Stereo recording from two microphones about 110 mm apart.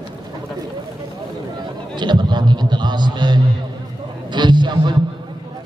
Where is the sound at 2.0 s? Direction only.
40° right (ahead or behind).